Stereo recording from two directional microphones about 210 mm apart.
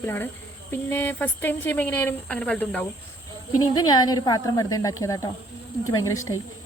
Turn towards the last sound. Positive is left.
turn(degrees=15)  # may be behind; listen again after turning